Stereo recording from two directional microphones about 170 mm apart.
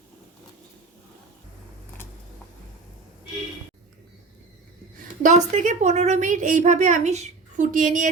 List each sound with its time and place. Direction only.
4.9 s a woman's voice: 45° right (ahead or behind)